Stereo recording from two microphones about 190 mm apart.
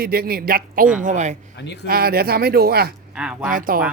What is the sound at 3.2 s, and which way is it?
Speech, 5° right (ahead or behind).